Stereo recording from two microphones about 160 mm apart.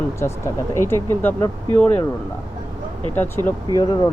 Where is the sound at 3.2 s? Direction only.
15° left (ahead or behind).